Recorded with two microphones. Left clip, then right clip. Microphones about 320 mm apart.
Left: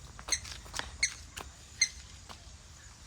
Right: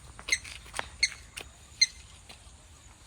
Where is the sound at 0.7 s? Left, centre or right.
Centre.